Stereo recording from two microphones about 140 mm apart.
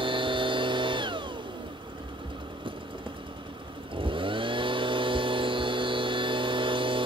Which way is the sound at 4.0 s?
35° right (ahead or behind).